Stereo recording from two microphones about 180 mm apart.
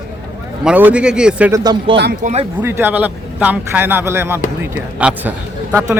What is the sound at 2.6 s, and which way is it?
A man's voice, 10° right (ahead or behind).